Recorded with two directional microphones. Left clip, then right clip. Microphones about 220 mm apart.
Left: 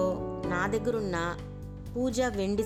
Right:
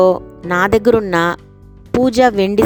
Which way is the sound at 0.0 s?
40° right (ahead or behind).